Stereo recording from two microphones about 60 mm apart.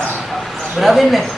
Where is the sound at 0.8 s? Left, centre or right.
Centre.